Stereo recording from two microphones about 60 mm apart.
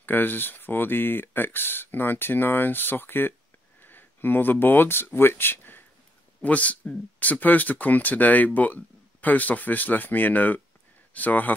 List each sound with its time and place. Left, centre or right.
0.0 s speech: left
6.4 s speech: left